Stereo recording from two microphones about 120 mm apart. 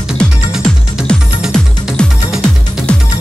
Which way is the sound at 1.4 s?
5° right (ahead or behind).